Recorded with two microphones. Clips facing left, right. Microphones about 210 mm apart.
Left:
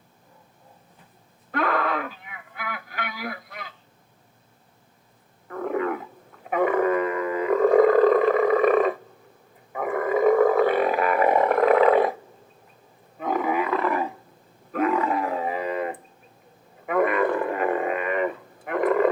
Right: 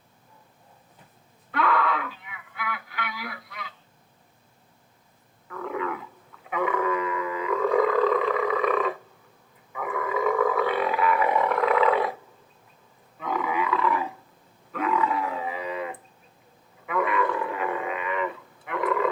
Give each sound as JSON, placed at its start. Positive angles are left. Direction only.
{"t": 1.5, "sound": "radio", "side_deg": 45}
{"t": 5.5, "sound": "a sound", "side_deg": 45}
{"t": 9.7, "sound": "roar", "side_deg": 45}
{"t": 13.1, "sound": "roaring cats", "side_deg": 45}
{"t": 14.7, "sound": "dog", "side_deg": 45}
{"t": 16.8, "sound": "a sound", "side_deg": 50}